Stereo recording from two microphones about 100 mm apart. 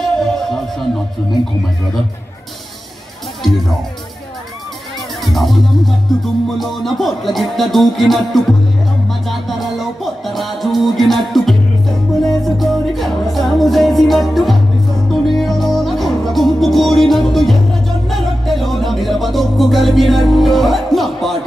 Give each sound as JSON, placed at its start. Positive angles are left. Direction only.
{"t": 0.0, "sound": "music", "side_deg": 5}
{"t": 5.2, "sound": "music", "side_deg": 0}
{"t": 12.5, "sound": "music", "side_deg": 0}